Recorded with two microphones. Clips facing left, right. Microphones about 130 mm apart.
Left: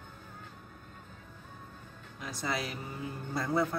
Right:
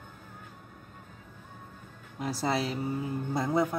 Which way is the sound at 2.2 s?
35° right (ahead or behind).